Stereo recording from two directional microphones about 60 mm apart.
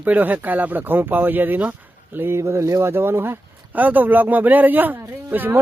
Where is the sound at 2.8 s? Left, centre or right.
Right.